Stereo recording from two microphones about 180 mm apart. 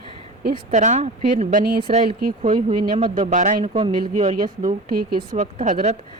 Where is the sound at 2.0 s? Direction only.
55° right (ahead or behind).